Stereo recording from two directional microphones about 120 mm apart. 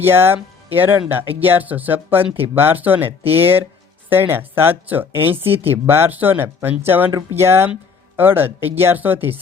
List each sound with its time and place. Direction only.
0.0 s speech: 20° right (ahead or behind)